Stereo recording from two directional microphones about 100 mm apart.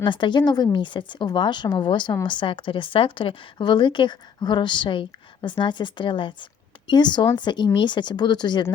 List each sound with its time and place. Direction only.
0.0 s a woman's voice: 50° left (ahead or behind)